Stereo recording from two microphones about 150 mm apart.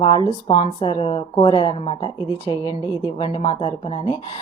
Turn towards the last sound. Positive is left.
turn(degrees=35)  # may be behind; listen again after turning